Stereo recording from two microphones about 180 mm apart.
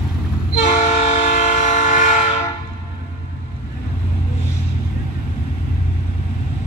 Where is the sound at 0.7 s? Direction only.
40° left (ahead or behind).